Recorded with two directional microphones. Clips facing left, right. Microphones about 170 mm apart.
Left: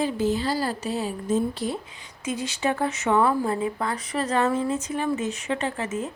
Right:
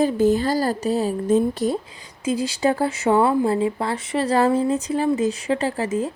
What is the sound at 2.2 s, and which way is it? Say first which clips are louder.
Speech: right 6 dB; 35° right (ahead or behind).